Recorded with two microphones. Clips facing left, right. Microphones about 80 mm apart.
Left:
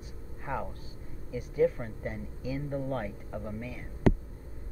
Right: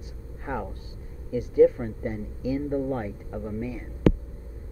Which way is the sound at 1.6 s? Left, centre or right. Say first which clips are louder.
Right 8 dB; centre.